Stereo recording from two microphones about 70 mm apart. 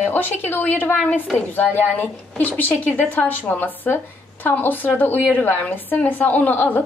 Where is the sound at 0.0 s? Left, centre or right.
Left.